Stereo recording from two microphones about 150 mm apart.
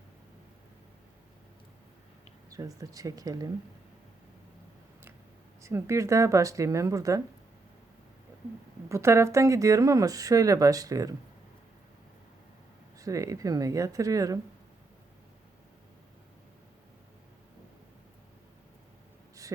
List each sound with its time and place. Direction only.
2.5 s speech: 25° right (ahead or behind)
5.6 s speech: 20° right (ahead or behind)
8.9 s speech: 20° right (ahead or behind)
13.0 s speech: 20° right (ahead or behind)